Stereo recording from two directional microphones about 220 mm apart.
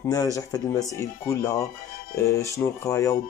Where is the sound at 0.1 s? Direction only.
15° left (ahead or behind).